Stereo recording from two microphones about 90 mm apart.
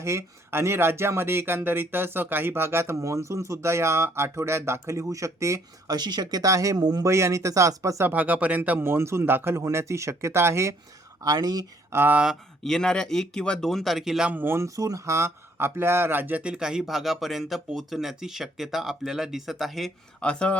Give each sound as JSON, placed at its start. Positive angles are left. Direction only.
{"t": 0.0, "sound": "speech", "side_deg": -30}
{"t": 6.0, "sound": "speech", "side_deg": -50}
{"t": 7.0, "sound": "speech", "side_deg": -35}
{"t": 8.0, "sound": "speech", "side_deg": -20}
{"t": 11.2, "sound": "speech", "side_deg": -45}
{"t": 11.9, "sound": "speech", "side_deg": -25}
{"t": 12.6, "sound": "speech", "side_deg": 5}
{"t": 14.3, "sound": "speech", "side_deg": -25}
{"t": 14.8, "sound": "speech", "side_deg": -40}
{"t": 20.2, "sound": "speech", "side_deg": 10}